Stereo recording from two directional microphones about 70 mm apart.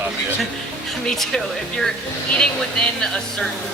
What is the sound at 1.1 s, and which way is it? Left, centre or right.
Speech, centre.